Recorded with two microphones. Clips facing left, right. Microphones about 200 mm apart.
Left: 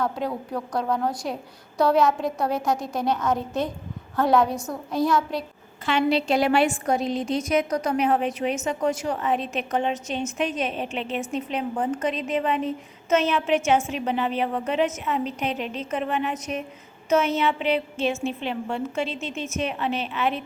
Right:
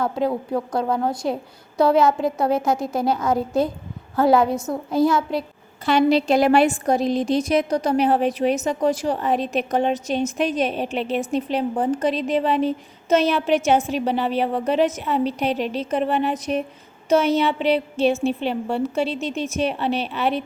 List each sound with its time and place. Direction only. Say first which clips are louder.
0.3 s a woman's voice: right 6 dB; 25° right (ahead or behind)
2.5 s a woman's voice: right 4 dB; 25° right (ahead or behind)
2.8 s a woman's voice: right 4 dB; 5° right (ahead or behind)
3.2 s a woman's voice: right 4 dB; 30° right (ahead or behind)
4.1 s a woman's voice: right 3 dB; 5° right (ahead or behind)
4.4 s a woman's voice: right 5 dB; 25° right (ahead or behind)
5.8 s a woman's voice: right 5 dB; 40° right (ahead or behind)